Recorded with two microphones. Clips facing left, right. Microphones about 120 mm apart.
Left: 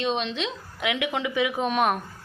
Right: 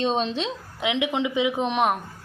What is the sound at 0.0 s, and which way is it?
A woman's voice, 30° right (ahead or behind).